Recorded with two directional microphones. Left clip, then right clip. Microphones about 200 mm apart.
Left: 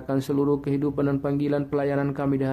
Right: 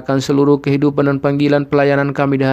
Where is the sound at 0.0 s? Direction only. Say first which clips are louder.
Right 10 dB; 40° right (ahead or behind).